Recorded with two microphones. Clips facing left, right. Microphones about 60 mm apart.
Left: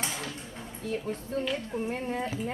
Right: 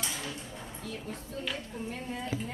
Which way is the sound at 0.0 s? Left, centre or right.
Left.